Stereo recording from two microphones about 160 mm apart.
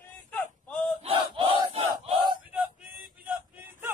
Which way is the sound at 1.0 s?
35° right (ahead or behind).